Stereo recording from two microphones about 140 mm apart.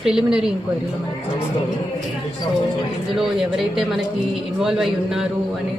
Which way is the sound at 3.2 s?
Centre (ahead or behind).